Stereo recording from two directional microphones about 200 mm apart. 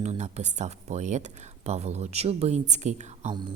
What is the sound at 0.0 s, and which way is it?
A woman's voice, 35° right (ahead or behind).